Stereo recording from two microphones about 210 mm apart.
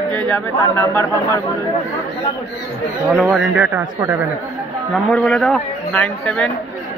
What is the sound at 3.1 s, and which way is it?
Speech, 5° right (ahead or behind).